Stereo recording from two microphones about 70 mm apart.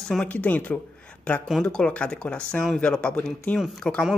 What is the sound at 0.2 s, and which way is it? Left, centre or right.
Speech, left.